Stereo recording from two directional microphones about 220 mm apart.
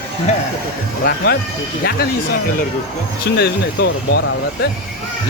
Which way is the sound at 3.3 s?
50° left (ahead or behind).